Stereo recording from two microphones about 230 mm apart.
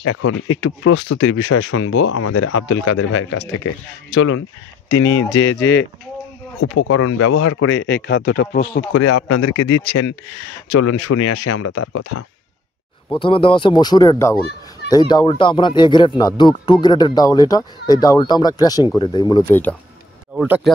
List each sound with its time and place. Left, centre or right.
0.0 s speech: left
3.6 s speech: left
6.6 s speech: left
8.9 s speech: left
10.8 s speech: left
13.1 s speech: left
20.3 s speech: centre